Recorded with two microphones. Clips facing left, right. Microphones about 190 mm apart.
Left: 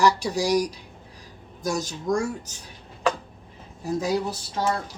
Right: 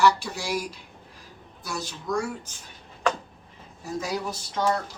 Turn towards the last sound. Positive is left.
turn(degrees=35)  # may be behind; listen again after turning